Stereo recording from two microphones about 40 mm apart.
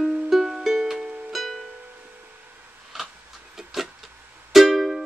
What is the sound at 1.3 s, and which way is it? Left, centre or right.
Music, centre.